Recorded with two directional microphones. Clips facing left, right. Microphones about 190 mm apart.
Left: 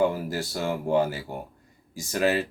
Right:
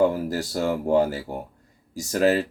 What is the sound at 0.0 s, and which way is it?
Speech, 40° right (ahead or behind).